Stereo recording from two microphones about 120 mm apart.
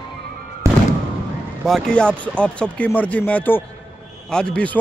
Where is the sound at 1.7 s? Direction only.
5° left (ahead or behind).